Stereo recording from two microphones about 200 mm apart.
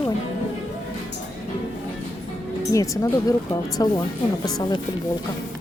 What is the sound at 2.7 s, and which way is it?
Speech, 15° left (ahead or behind).